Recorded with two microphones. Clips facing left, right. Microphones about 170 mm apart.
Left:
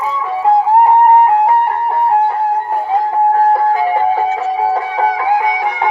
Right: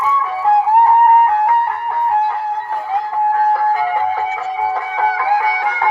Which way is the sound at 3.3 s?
25° left (ahead or behind).